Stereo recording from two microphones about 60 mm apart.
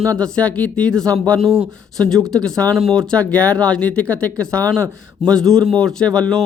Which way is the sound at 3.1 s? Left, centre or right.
Left.